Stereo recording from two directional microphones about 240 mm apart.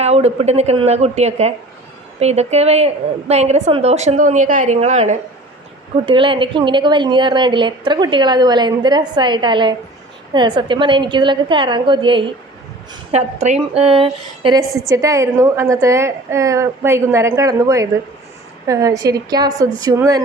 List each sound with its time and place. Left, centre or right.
0.0 s a woman's voice: right